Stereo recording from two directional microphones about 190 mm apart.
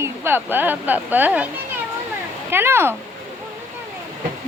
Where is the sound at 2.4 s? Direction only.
10° right (ahead or behind).